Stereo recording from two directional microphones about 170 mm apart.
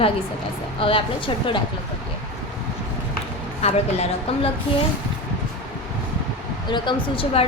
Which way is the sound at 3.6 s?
40° left (ahead or behind).